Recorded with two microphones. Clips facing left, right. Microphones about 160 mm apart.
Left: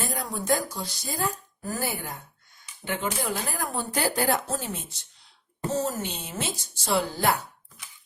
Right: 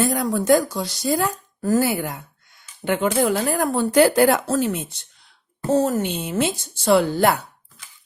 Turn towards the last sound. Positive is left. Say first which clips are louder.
# right 8 dB
turn(degrees=-60)  # may be behind; listen again after turning